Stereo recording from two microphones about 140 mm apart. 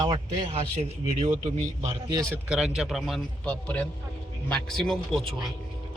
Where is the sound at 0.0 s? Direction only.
30° right (ahead or behind).